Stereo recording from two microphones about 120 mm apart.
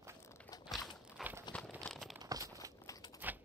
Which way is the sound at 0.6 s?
Centre (ahead or behind).